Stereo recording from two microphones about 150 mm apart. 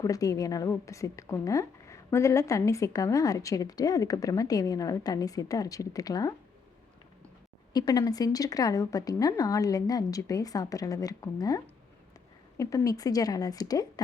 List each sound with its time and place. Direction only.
0.0 s a woman's voice: 25° left (ahead or behind)
7.7 s a woman's voice: 25° left (ahead or behind)